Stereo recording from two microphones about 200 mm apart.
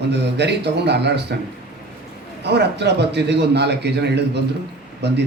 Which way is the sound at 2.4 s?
55° right (ahead or behind).